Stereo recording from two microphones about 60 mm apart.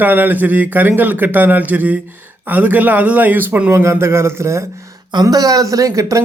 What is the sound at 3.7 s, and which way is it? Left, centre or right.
Speech, right.